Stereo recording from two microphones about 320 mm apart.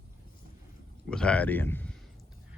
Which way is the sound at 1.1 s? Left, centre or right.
Centre.